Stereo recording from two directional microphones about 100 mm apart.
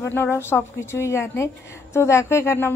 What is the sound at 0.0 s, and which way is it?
A woman's voice, 25° left (ahead or behind).